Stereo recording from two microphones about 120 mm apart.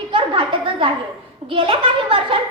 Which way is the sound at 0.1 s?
45° right (ahead or behind).